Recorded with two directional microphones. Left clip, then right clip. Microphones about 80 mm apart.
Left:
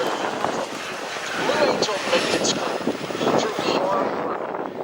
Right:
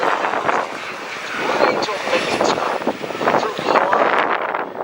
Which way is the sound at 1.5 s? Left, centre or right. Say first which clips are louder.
Right 3 dB; centre.